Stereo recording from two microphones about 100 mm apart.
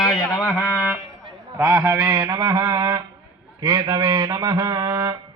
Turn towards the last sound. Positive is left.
turn(degrees=-40)  # may be behind; listen again after turning